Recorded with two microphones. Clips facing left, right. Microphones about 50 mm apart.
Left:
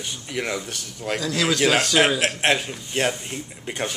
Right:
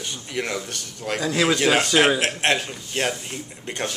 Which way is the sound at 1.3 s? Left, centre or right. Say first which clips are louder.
Right 1 dB; centre.